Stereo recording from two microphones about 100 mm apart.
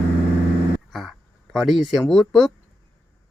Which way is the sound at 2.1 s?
Centre (ahead or behind).